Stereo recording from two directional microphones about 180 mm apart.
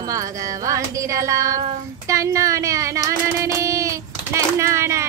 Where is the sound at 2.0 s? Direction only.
15° right (ahead or behind).